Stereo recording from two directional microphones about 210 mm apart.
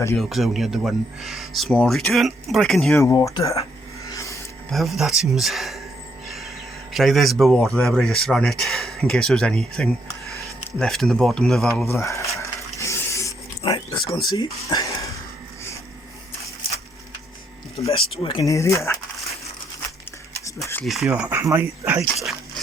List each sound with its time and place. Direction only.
0.2 s speech: centre (ahead or behind)
3.0 s speech: 15° left (ahead or behind)
4.1 s music: 15° left (ahead or behind)
4.7 s speech: centre (ahead or behind)
6.2 s a sound: centre (ahead or behind)
6.9 s speech: centre (ahead or behind)
11.9 s a sound: 15° left (ahead or behind)
14.1 s speech: 20° left (ahead or behind)
17.9 s speech: 25° left (ahead or behind)
20.8 s speech: centre (ahead or behind)